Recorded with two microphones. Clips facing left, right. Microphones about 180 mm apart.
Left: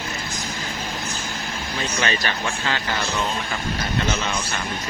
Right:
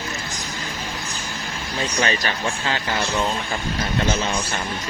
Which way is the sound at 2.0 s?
30° right (ahead or behind).